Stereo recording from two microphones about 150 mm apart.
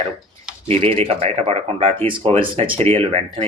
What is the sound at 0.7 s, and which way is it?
A man's voice, 40° right (ahead or behind).